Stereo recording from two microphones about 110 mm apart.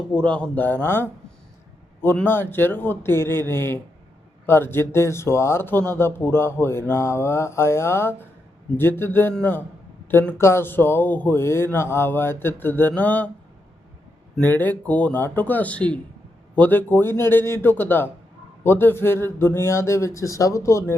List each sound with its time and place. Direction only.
0.1 s speech: 10° left (ahead or behind)
2.1 s speech: 20° left (ahead or behind)
14.4 s speech: 15° left (ahead or behind)